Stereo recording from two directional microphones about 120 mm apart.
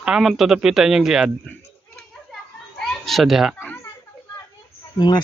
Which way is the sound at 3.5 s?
15° left (ahead or behind).